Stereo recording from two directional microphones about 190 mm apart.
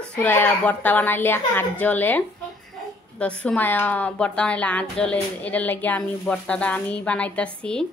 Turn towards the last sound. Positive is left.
turn(degrees=5)  # may be behind; listen again after turning